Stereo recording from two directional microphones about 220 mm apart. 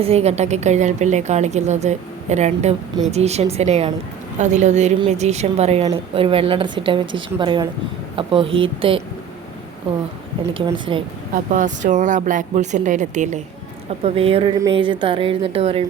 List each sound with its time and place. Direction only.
0.0 s a woman's voice: 30° right (ahead or behind)
10.5 s a woman's voice: 20° right (ahead or behind)
11.5 s a woman's voice: 35° right (ahead or behind)